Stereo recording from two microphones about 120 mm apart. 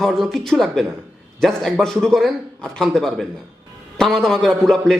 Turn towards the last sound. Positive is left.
turn(degrees=5)  # may be behind; listen again after turning